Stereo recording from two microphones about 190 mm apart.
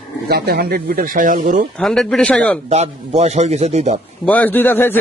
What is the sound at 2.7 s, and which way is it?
A man's voice, 35° right (ahead or behind).